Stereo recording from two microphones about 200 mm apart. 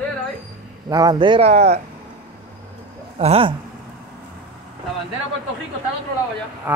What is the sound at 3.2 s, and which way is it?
Speech, 30° right (ahead or behind).